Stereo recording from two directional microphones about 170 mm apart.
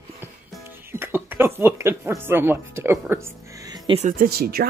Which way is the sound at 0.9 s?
15° right (ahead or behind).